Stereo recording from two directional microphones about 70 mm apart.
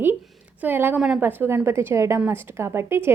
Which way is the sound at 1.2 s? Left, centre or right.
Right.